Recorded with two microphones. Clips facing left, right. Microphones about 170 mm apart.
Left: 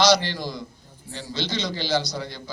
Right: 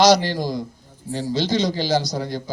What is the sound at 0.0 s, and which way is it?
A man's voice, 45° right (ahead or behind).